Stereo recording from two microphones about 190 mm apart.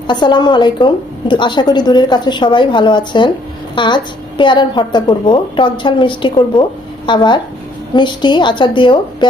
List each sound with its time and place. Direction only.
0.0 s a woman's voice: 25° left (ahead or behind)